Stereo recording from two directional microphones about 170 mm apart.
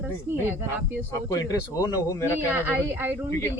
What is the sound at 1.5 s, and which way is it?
Speech, 20° left (ahead or behind).